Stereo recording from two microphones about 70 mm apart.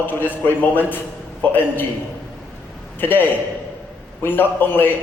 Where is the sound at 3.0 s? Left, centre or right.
Left.